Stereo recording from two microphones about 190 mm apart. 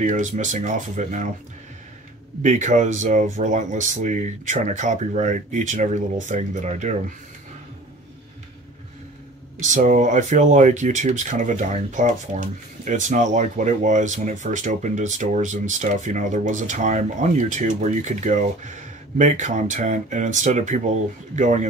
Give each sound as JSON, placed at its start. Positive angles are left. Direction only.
{"t": 0.0, "sound": "speech", "side_deg": -40}
{"t": 2.4, "sound": "speech", "side_deg": -40}
{"t": 9.6, "sound": "speech", "side_deg": -40}